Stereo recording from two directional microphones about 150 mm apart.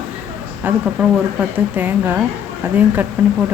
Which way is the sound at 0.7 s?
10° right (ahead or behind).